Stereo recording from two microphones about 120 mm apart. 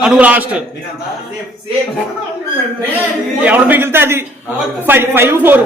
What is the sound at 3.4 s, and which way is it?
A man's voice, 15° right (ahead or behind).